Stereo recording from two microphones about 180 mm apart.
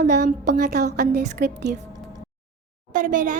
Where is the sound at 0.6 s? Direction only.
65° right (ahead or behind).